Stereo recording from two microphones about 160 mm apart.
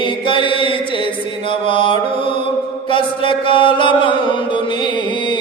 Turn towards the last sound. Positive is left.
turn(degrees=30)  # may be behind; listen again after turning